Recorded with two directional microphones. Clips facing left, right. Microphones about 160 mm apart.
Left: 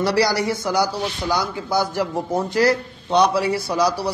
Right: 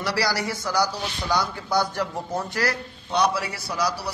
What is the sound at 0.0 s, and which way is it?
A man's voice, 25° left (ahead or behind).